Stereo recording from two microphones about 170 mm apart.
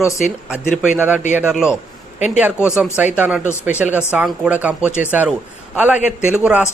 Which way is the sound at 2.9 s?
10° right (ahead or behind).